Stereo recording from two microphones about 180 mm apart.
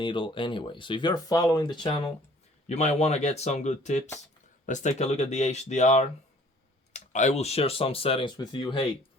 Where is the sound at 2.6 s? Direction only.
40° left (ahead or behind).